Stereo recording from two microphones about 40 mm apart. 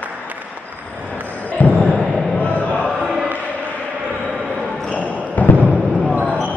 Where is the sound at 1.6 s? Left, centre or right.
Left.